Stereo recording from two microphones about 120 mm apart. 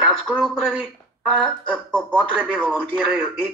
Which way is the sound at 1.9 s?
15° left (ahead or behind).